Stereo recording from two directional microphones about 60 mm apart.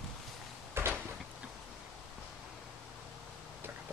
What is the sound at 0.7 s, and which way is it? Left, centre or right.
Door, right.